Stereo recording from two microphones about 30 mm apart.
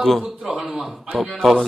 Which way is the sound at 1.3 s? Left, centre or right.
Centre.